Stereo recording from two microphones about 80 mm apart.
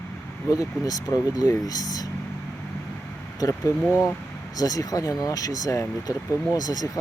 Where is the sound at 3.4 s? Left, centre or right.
Left.